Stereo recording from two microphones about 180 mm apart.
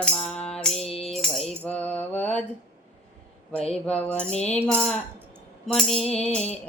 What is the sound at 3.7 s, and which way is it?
Mantra, 5° left (ahead or behind).